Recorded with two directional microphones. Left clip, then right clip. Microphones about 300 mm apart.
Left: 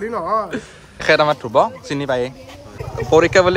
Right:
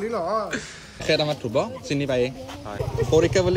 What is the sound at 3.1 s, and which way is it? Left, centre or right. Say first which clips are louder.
Speech: left 8 dB; left.